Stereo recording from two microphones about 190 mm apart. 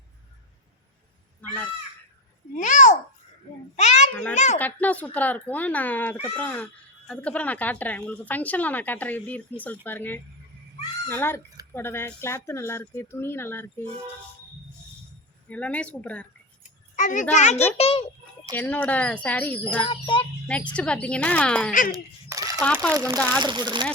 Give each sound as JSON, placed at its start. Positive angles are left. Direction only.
{"t": 1.4, "sound": "honk", "side_deg": 10}
{"t": 2.6, "sound": "babbling", "side_deg": 40}
{"t": 3.8, "sound": "a sound", "side_deg": 35}
{"t": 4.1, "sound": "speech", "side_deg": 5}
{"t": 15.4, "sound": "speech", "side_deg": 5}
{"t": 16.9, "sound": "a child's voice", "side_deg": 40}
{"t": 18.5, "sound": "speech", "side_deg": 10}
{"t": 19.9, "sound": "a child's voice", "side_deg": 25}
{"t": 20.7, "sound": "a woman's voice", "side_deg": 5}
{"t": 21.7, "sound": "speech", "side_deg": 45}
{"t": 21.9, "sound": "a sound", "side_deg": -15}
{"t": 22.6, "sound": "a woman's voice", "side_deg": 5}
{"t": 22.9, "sound": "speech", "side_deg": -15}